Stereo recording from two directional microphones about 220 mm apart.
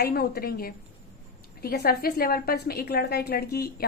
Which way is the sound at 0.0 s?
45° left (ahead or behind).